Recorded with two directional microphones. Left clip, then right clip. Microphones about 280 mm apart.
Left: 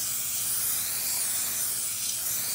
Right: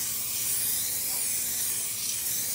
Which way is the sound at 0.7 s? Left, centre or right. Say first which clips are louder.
Even; centre.